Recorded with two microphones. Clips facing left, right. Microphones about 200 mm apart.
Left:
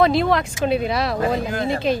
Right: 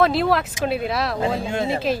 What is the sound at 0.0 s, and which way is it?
Speech, centre (ahead or behind).